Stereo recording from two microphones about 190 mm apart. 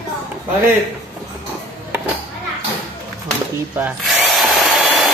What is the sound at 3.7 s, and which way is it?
Drill, 5° right (ahead or behind).